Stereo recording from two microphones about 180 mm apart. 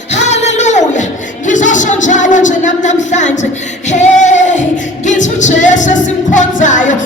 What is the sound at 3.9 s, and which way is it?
Singing, 40° left (ahead or behind).